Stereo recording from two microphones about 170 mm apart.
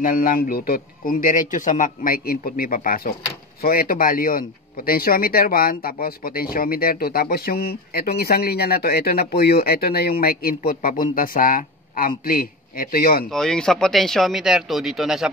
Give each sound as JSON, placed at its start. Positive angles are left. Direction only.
{"t": 0.0, "sound": "speech", "side_deg": 55}
{"t": 13.3, "sound": "speech", "side_deg": 5}